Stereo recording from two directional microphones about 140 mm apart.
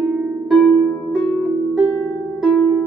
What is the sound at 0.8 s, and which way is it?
Harp, 20° left (ahead or behind).